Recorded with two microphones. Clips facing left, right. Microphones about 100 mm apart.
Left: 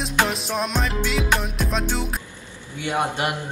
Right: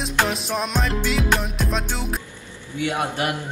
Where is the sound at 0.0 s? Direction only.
Centre (ahead or behind).